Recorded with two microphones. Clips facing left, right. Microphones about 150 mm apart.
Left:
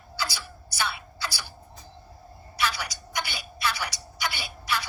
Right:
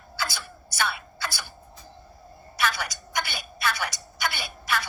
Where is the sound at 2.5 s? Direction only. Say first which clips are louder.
Right 2 dB; 50° right (ahead or behind).